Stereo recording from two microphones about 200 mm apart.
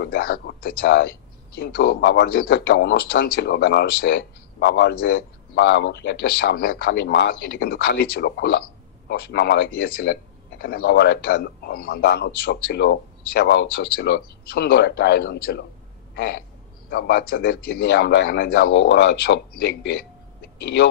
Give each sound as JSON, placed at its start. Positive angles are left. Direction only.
{"t": 0.0, "sound": "a man's voice", "side_deg": 50}
{"t": 5.5, "sound": "a man's voice", "side_deg": 65}
{"t": 16.9, "sound": "a man's voice", "side_deg": 50}